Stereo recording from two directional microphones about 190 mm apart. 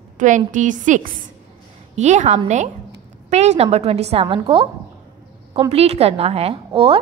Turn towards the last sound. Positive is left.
turn(degrees=-30)  # may be behind; listen again after turning